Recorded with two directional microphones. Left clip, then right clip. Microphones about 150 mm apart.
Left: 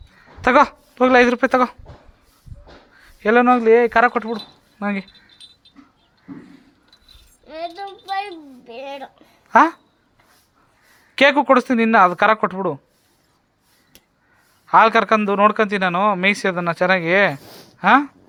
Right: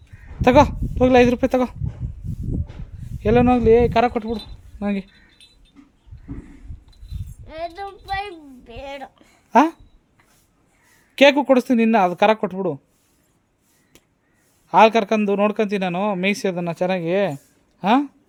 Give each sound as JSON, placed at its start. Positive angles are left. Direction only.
{"t": 0.4, "sound": "speech", "side_deg": -25}
{"t": 3.0, "sound": "speech", "side_deg": -30}
{"t": 7.4, "sound": "a sound", "side_deg": -10}
{"t": 9.5, "sound": "a child's voice", "side_deg": -25}
{"t": 11.1, "sound": "speech", "side_deg": -30}
{"t": 14.7, "sound": "speech", "side_deg": -25}